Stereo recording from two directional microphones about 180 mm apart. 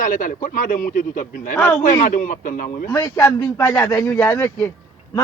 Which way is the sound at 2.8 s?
15° left (ahead or behind).